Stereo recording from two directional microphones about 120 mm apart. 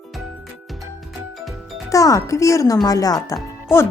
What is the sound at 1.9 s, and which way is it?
Speech, 30° left (ahead or behind).